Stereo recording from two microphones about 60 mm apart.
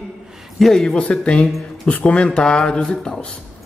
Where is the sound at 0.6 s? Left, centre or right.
Centre.